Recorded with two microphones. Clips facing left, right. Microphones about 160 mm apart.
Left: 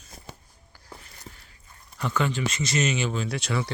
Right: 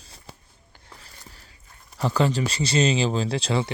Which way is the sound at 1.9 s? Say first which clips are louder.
Right 4 dB; 35° right (ahead or behind).